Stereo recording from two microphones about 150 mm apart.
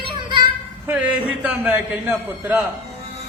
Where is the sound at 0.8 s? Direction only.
10° right (ahead or behind).